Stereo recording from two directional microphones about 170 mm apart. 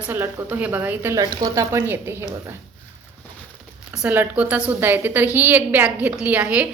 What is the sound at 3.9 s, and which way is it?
A woman's voice, 10° right (ahead or behind).